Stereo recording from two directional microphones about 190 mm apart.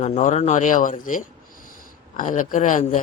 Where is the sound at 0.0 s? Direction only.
40° left (ahead or behind).